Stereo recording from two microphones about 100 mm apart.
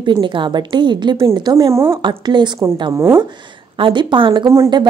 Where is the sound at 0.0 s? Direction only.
50° right (ahead or behind).